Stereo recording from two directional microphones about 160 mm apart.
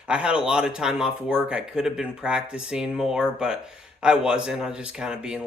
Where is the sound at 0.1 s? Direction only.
5° right (ahead or behind).